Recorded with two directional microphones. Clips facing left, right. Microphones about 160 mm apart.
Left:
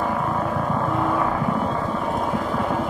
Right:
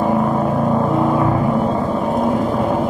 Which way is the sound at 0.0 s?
25° right (ahead or behind).